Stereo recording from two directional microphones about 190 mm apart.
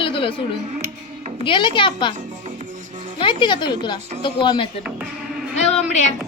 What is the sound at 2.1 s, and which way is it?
Music, 40° right (ahead or behind).